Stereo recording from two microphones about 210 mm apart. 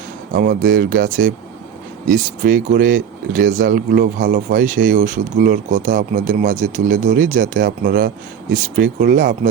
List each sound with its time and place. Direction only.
0.3 s speech: 40° right (ahead or behind)